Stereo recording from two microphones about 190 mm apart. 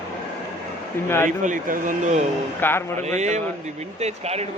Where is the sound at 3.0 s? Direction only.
35° right (ahead or behind).